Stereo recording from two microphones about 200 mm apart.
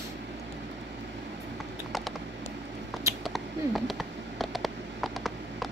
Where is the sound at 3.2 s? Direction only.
Centre (ahead or behind).